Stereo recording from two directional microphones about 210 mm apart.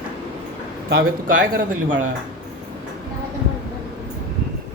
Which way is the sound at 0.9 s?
45° right (ahead or behind).